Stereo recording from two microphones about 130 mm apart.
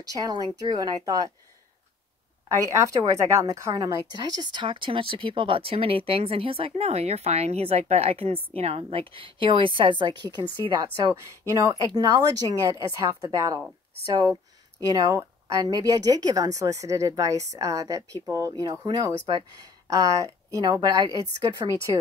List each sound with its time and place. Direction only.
0.2 s a woman's voice: 30° right (ahead or behind)
2.6 s a woman's voice: 25° right (ahead or behind)
14.8 s a woman's voice: 25° right (ahead or behind)
19.6 s a sound: 25° right (ahead or behind)
20.5 s a woman's voice: 30° right (ahead or behind)